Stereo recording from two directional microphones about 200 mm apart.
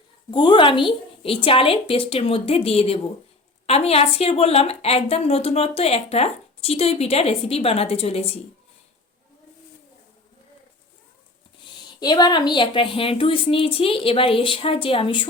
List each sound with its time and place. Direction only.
0.3 s a woman's voice: 20° left (ahead or behind)
11.9 s a woman's voice: 20° left (ahead or behind)